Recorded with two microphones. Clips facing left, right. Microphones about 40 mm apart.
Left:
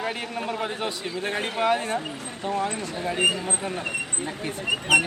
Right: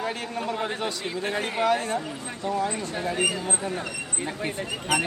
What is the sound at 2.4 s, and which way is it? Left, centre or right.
Speech, left.